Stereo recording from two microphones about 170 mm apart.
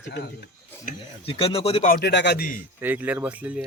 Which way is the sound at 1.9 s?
85° left.